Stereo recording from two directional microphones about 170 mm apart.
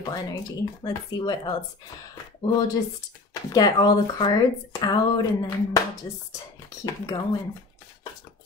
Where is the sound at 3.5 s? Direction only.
25° left (ahead or behind).